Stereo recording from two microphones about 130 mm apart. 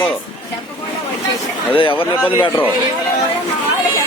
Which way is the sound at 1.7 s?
40° left (ahead or behind).